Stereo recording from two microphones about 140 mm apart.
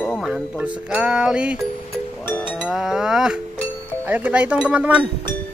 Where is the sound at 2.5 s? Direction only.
5° right (ahead or behind).